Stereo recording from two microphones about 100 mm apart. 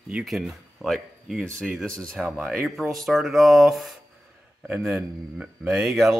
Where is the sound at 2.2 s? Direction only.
10° right (ahead or behind).